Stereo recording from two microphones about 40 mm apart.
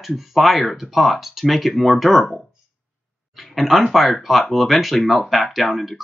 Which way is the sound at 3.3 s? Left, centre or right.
Centre.